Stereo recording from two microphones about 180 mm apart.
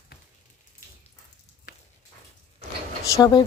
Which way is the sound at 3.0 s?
20° left (ahead or behind).